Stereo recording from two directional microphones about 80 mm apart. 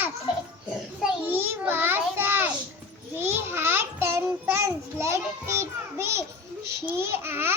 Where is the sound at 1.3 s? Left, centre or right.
Right.